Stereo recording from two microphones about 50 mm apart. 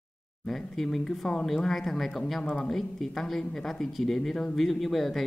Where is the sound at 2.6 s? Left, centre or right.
Centre.